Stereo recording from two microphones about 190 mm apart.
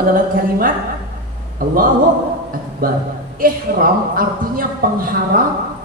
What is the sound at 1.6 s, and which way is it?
Speech, 50° right (ahead or behind).